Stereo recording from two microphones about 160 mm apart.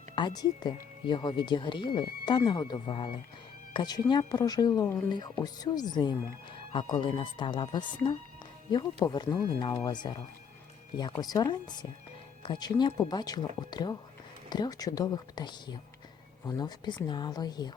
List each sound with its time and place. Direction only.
0.2 s speech: 25° left (ahead or behind)
11.2 s speech: 25° left (ahead or behind)